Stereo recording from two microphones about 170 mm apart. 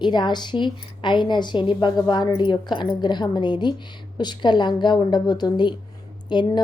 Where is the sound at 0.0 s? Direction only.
25° left (ahead or behind).